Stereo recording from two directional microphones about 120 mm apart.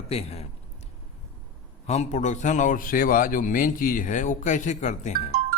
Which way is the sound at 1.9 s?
80° left.